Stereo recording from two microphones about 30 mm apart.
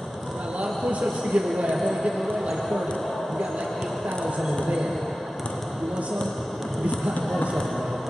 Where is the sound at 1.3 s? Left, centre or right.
Right.